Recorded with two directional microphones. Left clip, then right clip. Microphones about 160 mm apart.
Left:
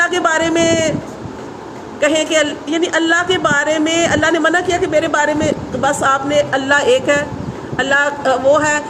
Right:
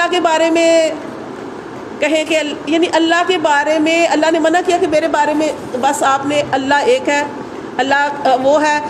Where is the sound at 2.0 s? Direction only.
15° right (ahead or behind).